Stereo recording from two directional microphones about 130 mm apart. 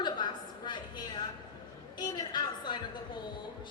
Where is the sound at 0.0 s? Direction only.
35° left (ahead or behind).